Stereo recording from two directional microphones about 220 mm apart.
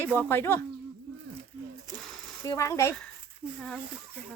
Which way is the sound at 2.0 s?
Centre (ahead or behind).